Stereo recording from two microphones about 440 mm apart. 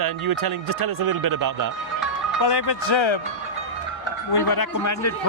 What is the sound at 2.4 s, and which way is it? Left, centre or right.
Speech, left.